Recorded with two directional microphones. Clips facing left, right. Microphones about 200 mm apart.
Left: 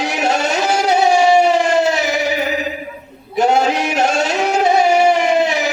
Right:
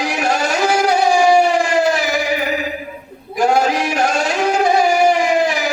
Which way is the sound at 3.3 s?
25° left (ahead or behind).